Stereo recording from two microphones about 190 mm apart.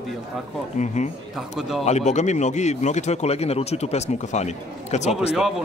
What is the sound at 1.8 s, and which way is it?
Speech, 35° left (ahead or behind).